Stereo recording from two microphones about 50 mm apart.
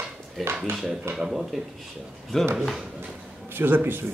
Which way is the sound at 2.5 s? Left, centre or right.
Centre.